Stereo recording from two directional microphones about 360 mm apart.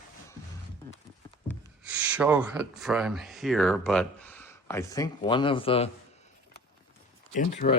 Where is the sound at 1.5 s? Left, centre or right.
Centre.